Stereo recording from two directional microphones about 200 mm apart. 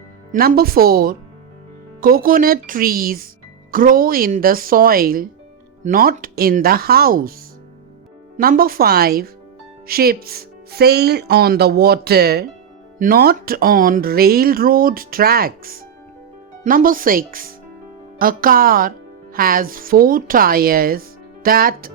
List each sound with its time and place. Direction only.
0.3 s a woman's voice: 50° right (ahead or behind)
8.4 s a woman's voice: 45° right (ahead or behind)